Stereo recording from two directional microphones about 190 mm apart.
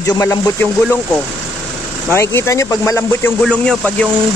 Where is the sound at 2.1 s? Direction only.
15° left (ahead or behind).